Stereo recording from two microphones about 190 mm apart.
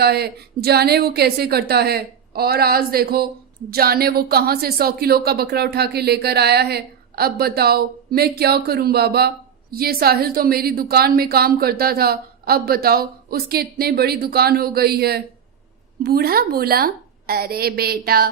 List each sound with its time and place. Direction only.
0.0 s a woman's voice: 55° right (ahead or behind)